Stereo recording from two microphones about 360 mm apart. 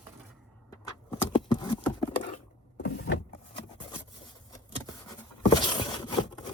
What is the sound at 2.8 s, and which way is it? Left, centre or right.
Power windows, left.